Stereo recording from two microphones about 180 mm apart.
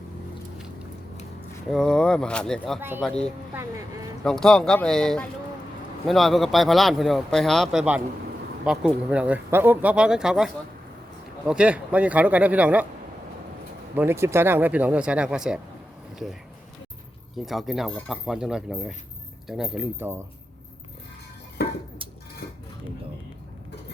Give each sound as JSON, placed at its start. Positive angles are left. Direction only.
{"t": 1.7, "sound": "a man's voice", "side_deg": 5}
{"t": 3.5, "sound": "speech", "side_deg": -15}
{"t": 4.2, "sound": "a man's voice", "side_deg": 5}
{"t": 13.9, "sound": "speech", "side_deg": -10}
{"t": 17.3, "sound": "a man's voice", "side_deg": 0}
{"t": 21.6, "sound": "dishes", "side_deg": 65}